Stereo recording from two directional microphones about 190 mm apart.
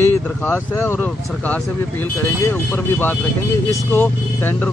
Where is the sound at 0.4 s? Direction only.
10° left (ahead or behind).